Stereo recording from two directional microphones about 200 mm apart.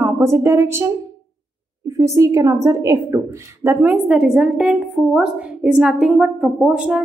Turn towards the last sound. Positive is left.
turn(degrees=-5)  # may be behind; listen again after turning